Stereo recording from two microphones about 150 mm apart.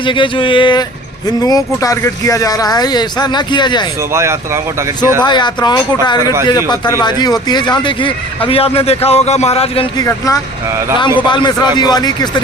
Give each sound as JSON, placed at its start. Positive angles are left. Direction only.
{"t": 0.0, "sound": "speech", "side_deg": 35}
{"t": 4.1, "sound": "speech", "side_deg": -20}
{"t": 5.2, "sound": "speech", "side_deg": 30}
{"t": 10.0, "sound": "speech", "side_deg": 20}